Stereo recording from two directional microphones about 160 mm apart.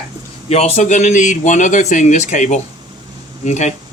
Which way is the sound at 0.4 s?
40° left (ahead or behind).